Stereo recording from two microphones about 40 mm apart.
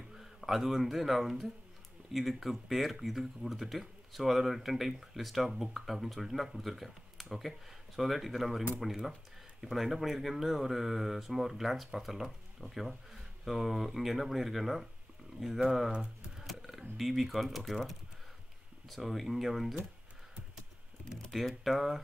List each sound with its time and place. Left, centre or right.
0.1 s speech: centre
15.9 s speech: right
16.3 s speech: centre
21.3 s speech: centre